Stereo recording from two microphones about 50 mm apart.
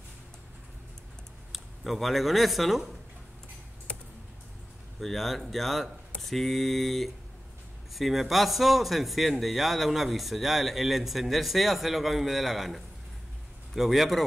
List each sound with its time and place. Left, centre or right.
1.5 s speech: centre
3.9 s computer keyboard: left
5.0 s a man's voice: centre